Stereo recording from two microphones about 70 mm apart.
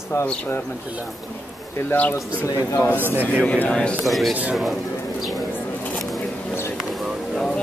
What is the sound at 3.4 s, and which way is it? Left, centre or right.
Speech, centre.